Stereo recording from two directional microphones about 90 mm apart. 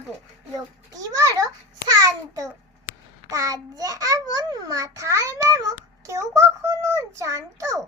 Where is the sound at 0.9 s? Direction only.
45° right (ahead or behind).